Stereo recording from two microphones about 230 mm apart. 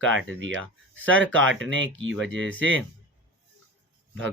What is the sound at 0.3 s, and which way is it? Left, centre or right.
Speech, right.